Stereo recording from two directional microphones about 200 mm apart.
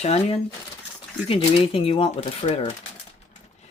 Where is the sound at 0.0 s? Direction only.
30° left (ahead or behind).